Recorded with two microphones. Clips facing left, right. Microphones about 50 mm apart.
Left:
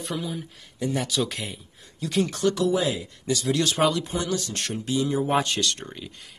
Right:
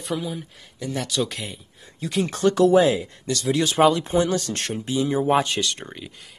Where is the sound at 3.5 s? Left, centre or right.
Centre.